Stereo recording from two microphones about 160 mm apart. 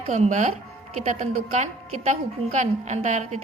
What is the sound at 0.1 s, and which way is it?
A woman's voice, 50° right (ahead or behind).